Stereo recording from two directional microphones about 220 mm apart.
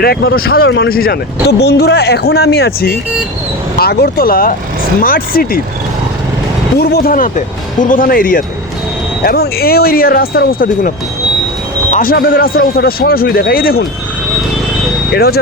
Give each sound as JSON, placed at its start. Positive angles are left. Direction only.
{"t": 0.0, "sound": "speech", "side_deg": 45}
{"t": 6.7, "sound": "speech", "side_deg": 45}
{"t": 15.1, "sound": "speech", "side_deg": 45}